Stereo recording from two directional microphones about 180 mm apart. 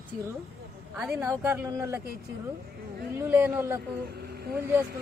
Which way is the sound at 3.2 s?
10° right (ahead or behind).